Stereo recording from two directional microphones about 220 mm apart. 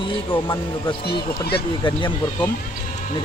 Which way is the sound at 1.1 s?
45° left (ahead or behind).